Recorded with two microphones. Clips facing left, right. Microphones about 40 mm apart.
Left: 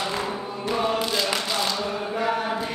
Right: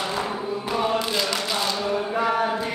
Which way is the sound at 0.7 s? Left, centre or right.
Centre.